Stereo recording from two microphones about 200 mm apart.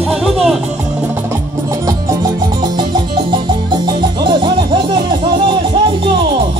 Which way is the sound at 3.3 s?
25° right (ahead or behind).